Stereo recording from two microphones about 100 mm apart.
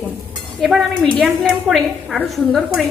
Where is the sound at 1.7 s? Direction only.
5° left (ahead or behind).